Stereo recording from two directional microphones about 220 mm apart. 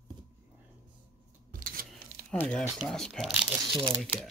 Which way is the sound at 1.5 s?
40° right (ahead or behind).